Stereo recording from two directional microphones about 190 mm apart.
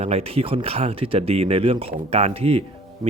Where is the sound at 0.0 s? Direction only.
30° right (ahead or behind).